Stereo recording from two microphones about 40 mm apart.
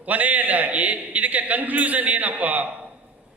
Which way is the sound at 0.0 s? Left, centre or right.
Right.